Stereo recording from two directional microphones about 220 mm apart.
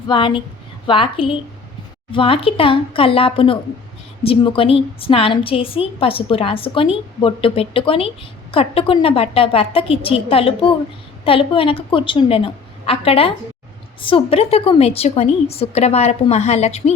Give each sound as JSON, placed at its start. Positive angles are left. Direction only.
{"t": 0.1, "sound": "a woman's voice", "side_deg": 25}